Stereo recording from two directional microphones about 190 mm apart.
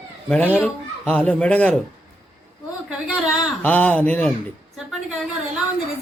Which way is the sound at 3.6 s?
5° left (ahead or behind).